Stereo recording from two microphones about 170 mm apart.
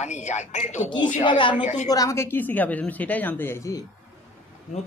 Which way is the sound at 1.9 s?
20° left (ahead or behind).